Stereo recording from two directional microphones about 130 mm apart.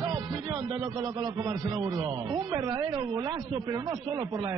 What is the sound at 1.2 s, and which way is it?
A man's voice, 30° right (ahead or behind).